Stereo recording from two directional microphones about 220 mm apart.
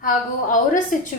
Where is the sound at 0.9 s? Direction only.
40° left (ahead or behind).